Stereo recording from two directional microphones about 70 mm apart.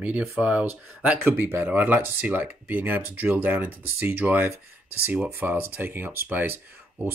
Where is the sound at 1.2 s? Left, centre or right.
Right.